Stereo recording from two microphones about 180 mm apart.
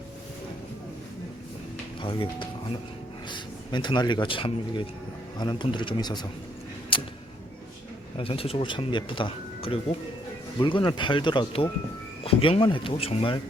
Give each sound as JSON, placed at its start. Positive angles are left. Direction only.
{"t": 2.0, "sound": "speech", "side_deg": 25}
{"t": 6.9, "sound": "a sound", "side_deg": 30}
{"t": 8.2, "sound": "speech", "side_deg": 30}